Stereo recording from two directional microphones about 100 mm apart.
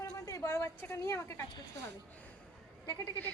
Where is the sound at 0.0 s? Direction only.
30° left (ahead or behind).